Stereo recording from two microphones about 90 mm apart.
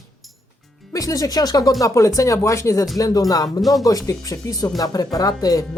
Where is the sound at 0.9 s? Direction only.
40° left (ahead or behind).